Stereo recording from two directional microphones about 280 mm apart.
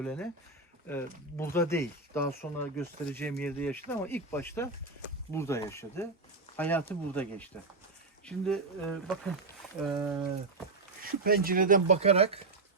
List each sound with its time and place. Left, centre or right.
0.0 s speech: centre
11.0 s speech: right